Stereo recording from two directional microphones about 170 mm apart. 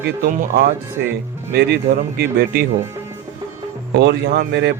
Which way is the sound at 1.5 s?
70° right (ahead or behind).